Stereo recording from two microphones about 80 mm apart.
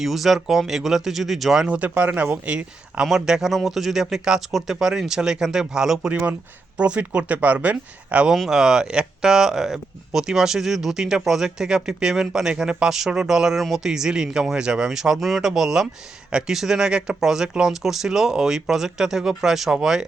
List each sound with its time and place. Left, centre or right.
0.0 s speech: centre
1.6 s speech: centre
8.3 s speech: centre